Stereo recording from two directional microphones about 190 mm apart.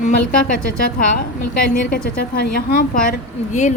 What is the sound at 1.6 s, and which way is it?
A woman's voice, 50° left (ahead or behind).